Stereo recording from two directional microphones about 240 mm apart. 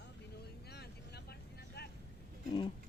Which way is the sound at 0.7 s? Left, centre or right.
Left.